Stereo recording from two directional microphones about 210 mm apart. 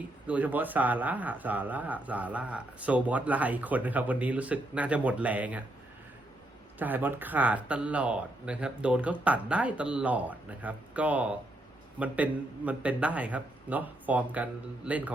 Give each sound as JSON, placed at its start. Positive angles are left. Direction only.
{"t": 0.3, "sound": "speech", "side_deg": -5}
{"t": 6.7, "sound": "speech", "side_deg": -10}